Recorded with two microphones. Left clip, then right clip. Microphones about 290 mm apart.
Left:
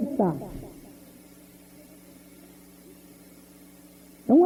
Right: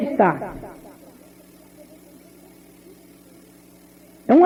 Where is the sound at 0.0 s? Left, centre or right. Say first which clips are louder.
Right 9 dB; left.